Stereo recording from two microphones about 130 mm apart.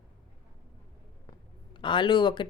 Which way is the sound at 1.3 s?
35° left (ahead or behind).